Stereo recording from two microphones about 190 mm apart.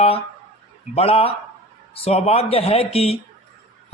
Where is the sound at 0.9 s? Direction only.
30° left (ahead or behind).